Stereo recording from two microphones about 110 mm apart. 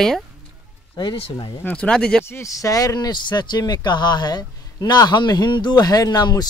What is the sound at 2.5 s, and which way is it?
Speech, 30° left (ahead or behind).